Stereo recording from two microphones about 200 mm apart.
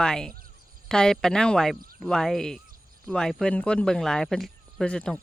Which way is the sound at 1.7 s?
45° right (ahead or behind).